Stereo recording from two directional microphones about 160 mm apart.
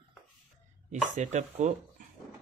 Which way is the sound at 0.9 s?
45° right (ahead or behind).